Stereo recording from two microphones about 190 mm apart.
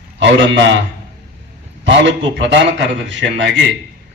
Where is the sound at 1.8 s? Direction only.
70° right (ahead or behind).